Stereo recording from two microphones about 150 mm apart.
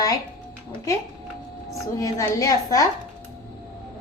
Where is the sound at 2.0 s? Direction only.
20° left (ahead or behind).